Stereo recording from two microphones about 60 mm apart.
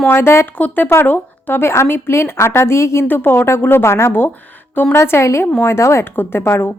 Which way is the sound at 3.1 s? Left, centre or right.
Left.